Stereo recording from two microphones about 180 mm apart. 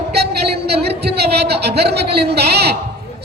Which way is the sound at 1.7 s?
65° right (ahead or behind).